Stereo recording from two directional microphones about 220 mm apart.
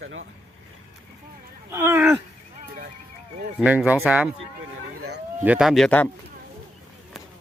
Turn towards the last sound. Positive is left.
turn(degrees=0)  # may be behind; listen again after turning